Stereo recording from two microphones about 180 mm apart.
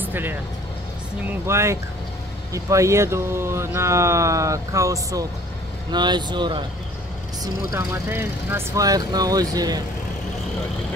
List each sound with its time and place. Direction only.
0.0 s speech: 10° right (ahead or behind)
1.4 s speech: 15° right (ahead or behind)